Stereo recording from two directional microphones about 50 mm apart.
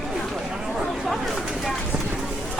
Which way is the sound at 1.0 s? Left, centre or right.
Centre.